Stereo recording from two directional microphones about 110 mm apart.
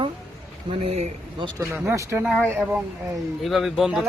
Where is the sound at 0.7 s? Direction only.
60° right (ahead or behind).